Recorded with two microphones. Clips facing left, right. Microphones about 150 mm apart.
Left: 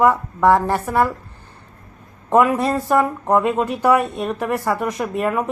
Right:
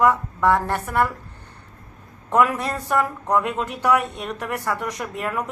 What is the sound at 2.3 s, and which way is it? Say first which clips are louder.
Speech: left 5 dB; 20° left (ahead or behind).